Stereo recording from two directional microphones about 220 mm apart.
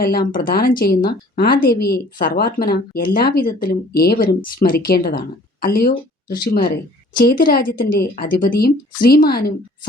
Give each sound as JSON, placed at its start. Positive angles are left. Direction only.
{"t": 0.0, "sound": "a woman's voice", "side_deg": 40}